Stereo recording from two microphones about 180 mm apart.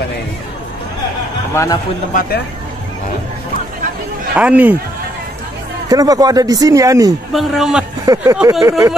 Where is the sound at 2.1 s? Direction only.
55° left (ahead or behind).